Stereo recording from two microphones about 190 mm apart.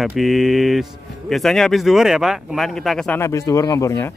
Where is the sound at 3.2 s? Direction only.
15° left (ahead or behind).